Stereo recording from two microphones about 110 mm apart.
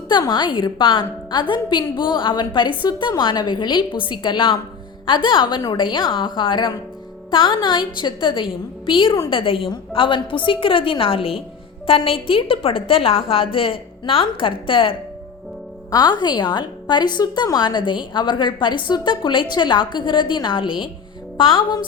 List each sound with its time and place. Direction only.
0.1 s a woman's voice: 45° left (ahead or behind)
15.9 s a woman's voice: 40° left (ahead or behind)